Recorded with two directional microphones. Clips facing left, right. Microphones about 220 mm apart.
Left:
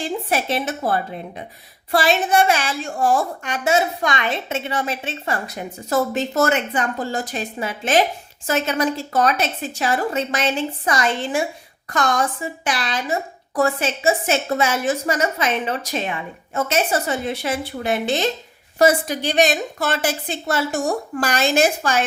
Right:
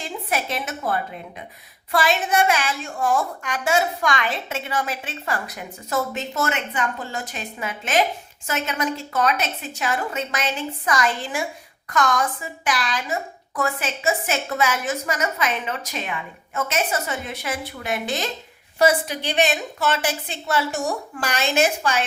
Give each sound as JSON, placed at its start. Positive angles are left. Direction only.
{"t": 0.0, "sound": "a woman's voice", "side_deg": 30}
{"t": 18.8, "sound": "a woman's voice", "side_deg": 40}